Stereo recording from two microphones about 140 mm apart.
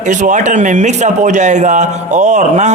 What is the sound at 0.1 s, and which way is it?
A man's voice, 60° right (ahead or behind).